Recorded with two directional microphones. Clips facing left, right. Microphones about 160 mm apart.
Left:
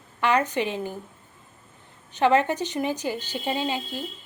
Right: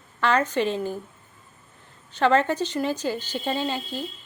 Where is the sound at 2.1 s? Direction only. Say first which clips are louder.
Even; 15° left (ahead or behind).